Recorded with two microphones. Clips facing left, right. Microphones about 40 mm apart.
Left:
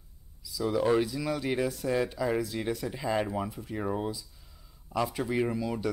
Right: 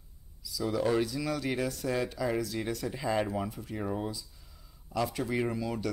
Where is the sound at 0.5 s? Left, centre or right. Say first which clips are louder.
Left 3 dB; centre.